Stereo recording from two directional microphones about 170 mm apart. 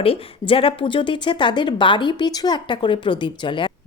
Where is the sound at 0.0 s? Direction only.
35° left (ahead or behind).